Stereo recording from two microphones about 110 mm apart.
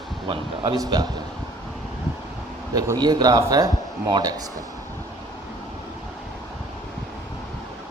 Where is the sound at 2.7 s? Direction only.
35° right (ahead or behind).